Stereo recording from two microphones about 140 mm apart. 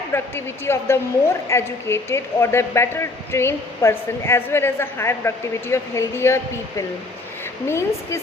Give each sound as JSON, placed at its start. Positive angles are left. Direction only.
{"t": 0.1, "sound": "a woman's voice", "side_deg": 15}